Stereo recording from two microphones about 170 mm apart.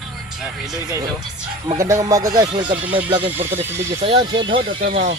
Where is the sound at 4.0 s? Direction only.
35° right (ahead or behind).